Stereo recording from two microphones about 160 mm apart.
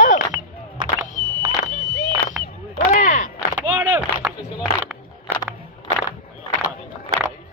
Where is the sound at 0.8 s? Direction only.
25° right (ahead or behind).